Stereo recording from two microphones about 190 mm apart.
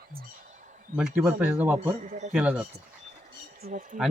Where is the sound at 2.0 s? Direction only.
40° right (ahead or behind).